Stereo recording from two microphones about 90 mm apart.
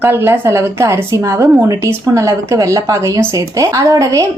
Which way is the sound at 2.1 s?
35° right (ahead or behind).